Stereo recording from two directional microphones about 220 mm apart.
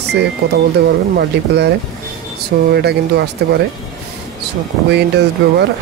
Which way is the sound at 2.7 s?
50° right (ahead or behind).